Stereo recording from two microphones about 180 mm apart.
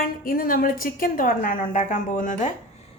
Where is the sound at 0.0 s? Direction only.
55° left (ahead or behind).